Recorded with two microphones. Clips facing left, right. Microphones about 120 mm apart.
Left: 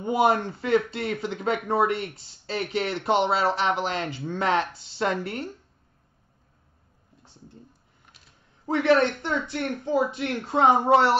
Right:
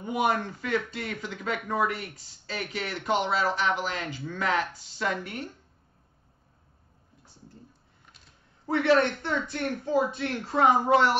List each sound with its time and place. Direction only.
0.0 s speech: 30° left (ahead or behind)
8.6 s speech: 20° left (ahead or behind)